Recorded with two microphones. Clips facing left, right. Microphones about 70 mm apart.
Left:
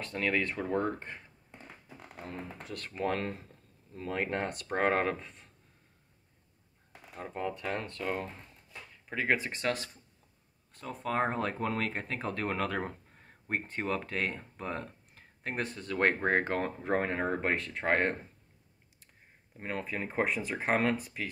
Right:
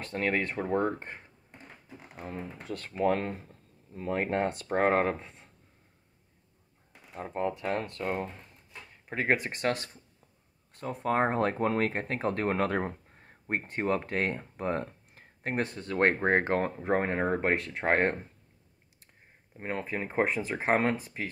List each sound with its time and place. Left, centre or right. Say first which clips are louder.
0.0 s speech: right 1 dB; right
2.3 s speech: right 4 dB; right
7.2 s speech: right 4 dB; right
10.8 s speech: right 4 dB; right
19.5 s speech: right 3 dB; right